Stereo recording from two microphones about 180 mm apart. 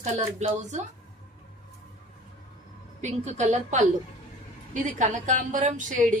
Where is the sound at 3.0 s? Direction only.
40° right (ahead or behind).